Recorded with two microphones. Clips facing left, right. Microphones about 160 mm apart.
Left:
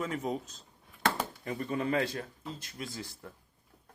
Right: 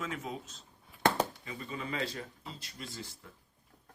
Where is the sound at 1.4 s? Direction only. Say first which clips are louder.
Left 8 dB; 55° left (ahead or behind).